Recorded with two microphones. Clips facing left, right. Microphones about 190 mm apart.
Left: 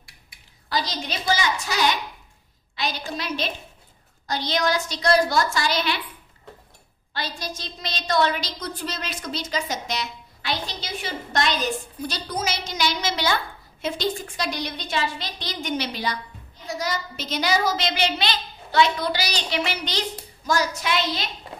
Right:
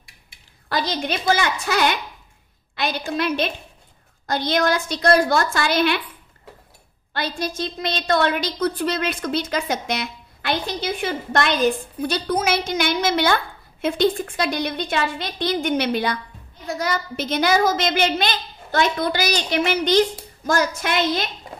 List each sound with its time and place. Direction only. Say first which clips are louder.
0.7 s a woman's voice: right 4 dB; 55° right (ahead or behind)
7.2 s a woman's voice: right 7 dB; 55° right (ahead or behind)